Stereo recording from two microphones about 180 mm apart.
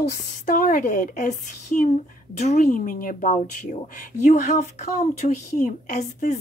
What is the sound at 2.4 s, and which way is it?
A woman's voice, 40° left (ahead or behind).